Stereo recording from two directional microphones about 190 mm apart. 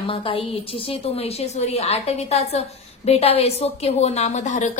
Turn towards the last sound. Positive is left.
turn(degrees=40)  # may be behind; listen again after turning